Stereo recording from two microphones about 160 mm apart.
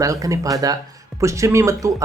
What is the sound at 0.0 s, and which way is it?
Speech, 20° right (ahead or behind).